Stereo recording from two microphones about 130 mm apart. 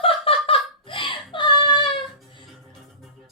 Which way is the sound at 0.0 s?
45° left (ahead or behind).